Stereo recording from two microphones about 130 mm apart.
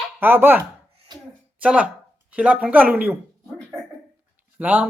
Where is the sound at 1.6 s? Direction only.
10° right (ahead or behind).